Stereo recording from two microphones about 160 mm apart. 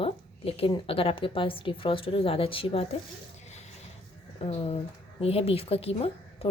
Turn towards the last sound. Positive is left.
turn(degrees=35)  # may be behind; listen again after turning